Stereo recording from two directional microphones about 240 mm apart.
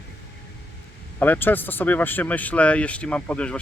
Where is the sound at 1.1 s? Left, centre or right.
Centre.